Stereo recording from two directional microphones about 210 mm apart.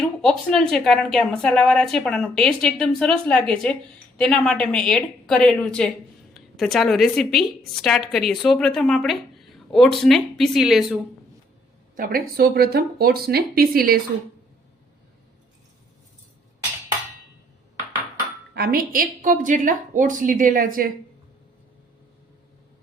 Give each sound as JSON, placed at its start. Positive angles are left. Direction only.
{"t": 0.0, "sound": "a woman's voice", "side_deg": 5}
{"t": 11.9, "sound": "speech", "side_deg": -45}
{"t": 18.5, "sound": "a woman's voice", "side_deg": -45}